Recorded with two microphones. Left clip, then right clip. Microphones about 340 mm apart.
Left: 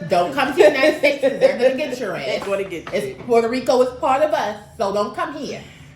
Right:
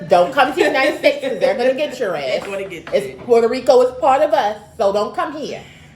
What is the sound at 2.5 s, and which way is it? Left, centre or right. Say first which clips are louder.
Speech: left 2 dB; centre.